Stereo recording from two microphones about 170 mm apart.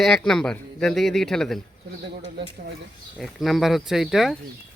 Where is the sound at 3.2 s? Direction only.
Centre (ahead or behind).